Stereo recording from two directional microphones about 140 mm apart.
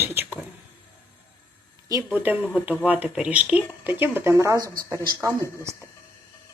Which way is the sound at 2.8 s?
10° right (ahead or behind).